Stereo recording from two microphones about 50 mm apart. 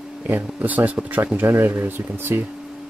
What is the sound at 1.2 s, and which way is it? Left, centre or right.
Speech, right.